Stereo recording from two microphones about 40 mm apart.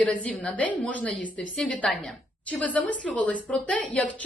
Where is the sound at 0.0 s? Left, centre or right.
Left.